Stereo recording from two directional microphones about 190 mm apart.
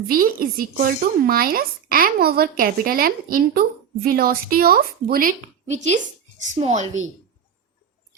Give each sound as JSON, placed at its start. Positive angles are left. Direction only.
{"t": 0.1, "sound": "a woman's voice", "side_deg": -50}